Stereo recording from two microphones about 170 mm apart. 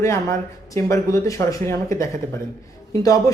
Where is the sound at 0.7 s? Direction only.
20° left (ahead or behind).